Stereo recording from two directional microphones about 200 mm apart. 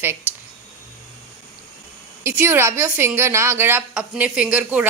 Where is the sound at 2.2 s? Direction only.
10° right (ahead or behind).